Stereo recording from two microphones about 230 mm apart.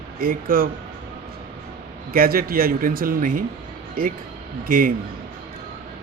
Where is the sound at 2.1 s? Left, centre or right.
Right.